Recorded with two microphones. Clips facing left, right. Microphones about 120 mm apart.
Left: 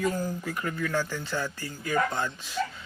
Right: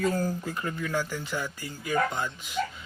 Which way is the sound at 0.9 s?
10° right (ahead or behind).